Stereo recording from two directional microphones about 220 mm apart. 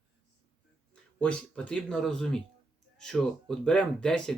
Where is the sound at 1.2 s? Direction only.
5° left (ahead or behind).